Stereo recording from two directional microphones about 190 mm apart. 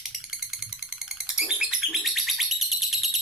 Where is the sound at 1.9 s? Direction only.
Centre (ahead or behind).